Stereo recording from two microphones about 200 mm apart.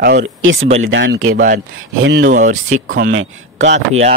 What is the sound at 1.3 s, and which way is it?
Speech, 40° right (ahead or behind).